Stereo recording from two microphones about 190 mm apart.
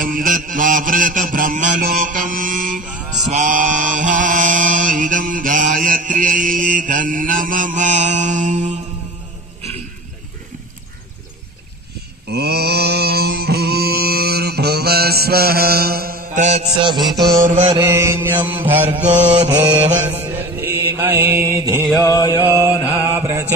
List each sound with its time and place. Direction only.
0.0 s mantra: 45° right (ahead or behind)
12.3 s mantra: 60° right (ahead or behind); by 16.6 s 40° right (ahead or behind)
16.7 s music: 25° right (ahead or behind)
17.1 s mantra: centre (ahead or behind)
17.4 s mantra: 40° right (ahead or behind)
17.7 s mantra: 15° right (ahead or behind)
22.0 s mantra: 20° left (ahead or behind)
22.4 s mantra: 15° right (ahead or behind)